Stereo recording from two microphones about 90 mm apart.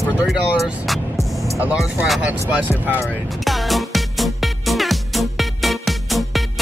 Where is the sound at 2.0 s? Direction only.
10° right (ahead or behind).